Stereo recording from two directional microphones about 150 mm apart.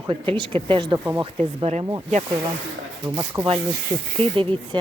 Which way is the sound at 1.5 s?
45° right (ahead or behind).